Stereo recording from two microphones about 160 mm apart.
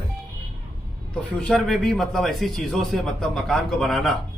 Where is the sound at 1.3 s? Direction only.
Centre (ahead or behind).